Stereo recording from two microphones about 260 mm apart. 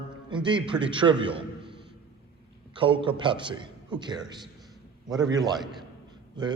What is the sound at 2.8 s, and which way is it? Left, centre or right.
A man's voice, centre.